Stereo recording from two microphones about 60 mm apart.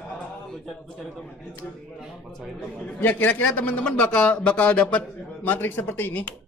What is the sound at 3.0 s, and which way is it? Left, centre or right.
Speech, left.